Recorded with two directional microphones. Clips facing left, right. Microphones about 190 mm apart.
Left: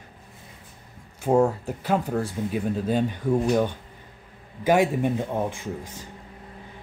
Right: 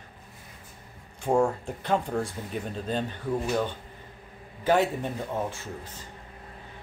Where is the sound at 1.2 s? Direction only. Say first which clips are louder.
Left 4 dB; 5° left (ahead or behind).